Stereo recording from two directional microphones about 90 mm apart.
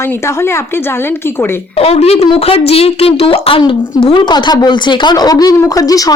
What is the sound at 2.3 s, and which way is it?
A woman's voice, 90° left.